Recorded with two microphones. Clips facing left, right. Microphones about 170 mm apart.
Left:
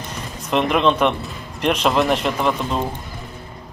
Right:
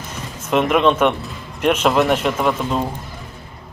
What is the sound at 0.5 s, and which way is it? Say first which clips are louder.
Speech: right 2 dB; centre (ahead or behind).